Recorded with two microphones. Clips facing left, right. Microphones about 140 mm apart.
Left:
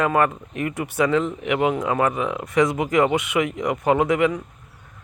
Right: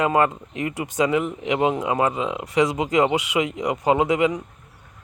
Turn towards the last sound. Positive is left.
turn(degrees=-20)  # may be behind; listen again after turning